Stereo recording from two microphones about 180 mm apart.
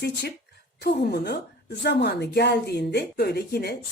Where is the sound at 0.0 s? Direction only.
65° left (ahead or behind).